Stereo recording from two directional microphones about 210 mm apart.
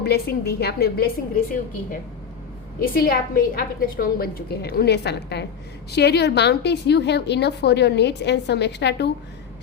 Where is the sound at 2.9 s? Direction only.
45° left (ahead or behind).